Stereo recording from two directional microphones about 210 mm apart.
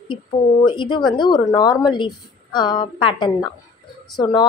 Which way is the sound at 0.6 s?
20° left (ahead or behind).